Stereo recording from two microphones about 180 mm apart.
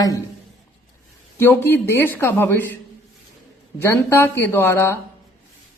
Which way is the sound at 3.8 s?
15° left (ahead or behind).